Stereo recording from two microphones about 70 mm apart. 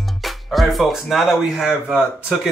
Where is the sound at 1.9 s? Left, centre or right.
Right.